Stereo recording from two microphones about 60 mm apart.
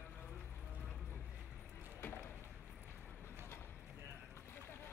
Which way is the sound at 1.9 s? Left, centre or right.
Left.